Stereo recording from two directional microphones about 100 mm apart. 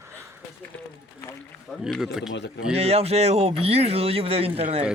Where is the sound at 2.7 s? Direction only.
90° right.